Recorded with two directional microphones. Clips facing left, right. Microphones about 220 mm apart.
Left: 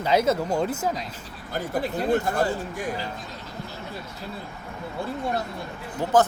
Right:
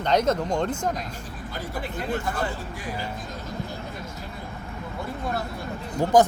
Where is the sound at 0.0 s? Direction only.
5° left (ahead or behind).